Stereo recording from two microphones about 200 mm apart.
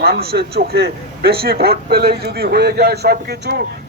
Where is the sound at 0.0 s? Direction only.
50° right (ahead or behind).